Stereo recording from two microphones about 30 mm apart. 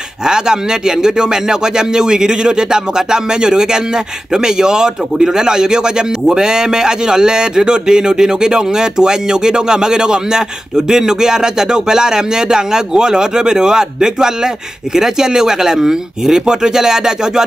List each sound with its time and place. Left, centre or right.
0.2 s speech: right